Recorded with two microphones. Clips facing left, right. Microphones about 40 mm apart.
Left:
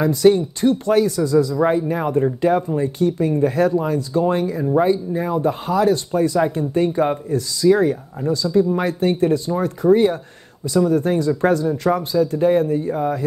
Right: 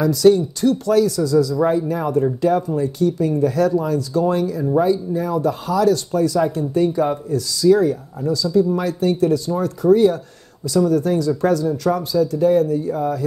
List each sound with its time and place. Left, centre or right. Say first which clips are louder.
0.0 s speech: right 1 dB; left